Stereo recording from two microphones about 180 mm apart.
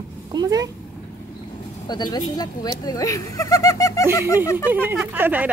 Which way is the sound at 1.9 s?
25° left (ahead or behind).